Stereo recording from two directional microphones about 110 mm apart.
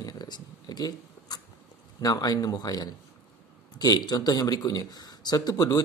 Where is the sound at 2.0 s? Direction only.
35° left (ahead or behind).